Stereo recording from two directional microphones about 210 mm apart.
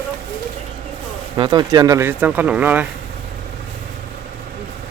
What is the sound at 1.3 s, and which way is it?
Speech, 20° right (ahead or behind).